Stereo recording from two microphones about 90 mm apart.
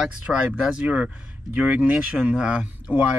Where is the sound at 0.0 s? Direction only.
10° right (ahead or behind).